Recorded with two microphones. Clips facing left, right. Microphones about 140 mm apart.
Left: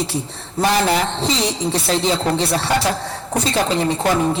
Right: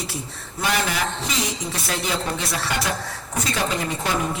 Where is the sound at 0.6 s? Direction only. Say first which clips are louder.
Left 7 dB; 35° left (ahead or behind).